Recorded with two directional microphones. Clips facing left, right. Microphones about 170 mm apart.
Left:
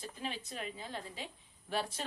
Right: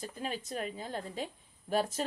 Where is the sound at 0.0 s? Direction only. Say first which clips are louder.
Right 4 dB; 45° right (ahead or behind).